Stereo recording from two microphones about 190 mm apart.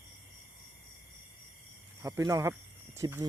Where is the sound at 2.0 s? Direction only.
15° right (ahead or behind).